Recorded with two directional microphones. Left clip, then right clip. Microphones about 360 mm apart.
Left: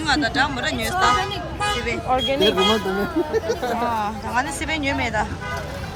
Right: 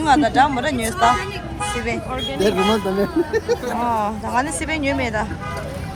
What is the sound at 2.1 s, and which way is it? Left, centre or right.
Speech, left.